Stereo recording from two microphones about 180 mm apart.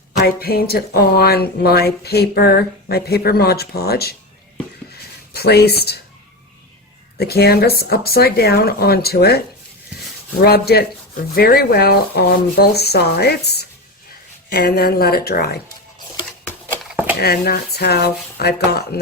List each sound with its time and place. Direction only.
0.2 s speech: 60° left (ahead or behind)
5.3 s speech: 60° left (ahead or behind)
7.2 s speech: 60° left (ahead or behind)
10.4 s speech: 60° left (ahead or behind)
17.2 s speech: 60° left (ahead or behind)